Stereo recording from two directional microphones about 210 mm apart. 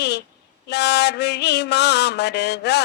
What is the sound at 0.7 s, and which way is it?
A man's voice, 55° left (ahead or behind).